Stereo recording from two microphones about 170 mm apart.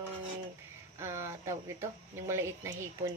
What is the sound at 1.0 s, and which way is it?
Speech, 15° right (ahead or behind).